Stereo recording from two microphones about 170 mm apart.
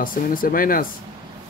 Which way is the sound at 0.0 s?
55° left (ahead or behind).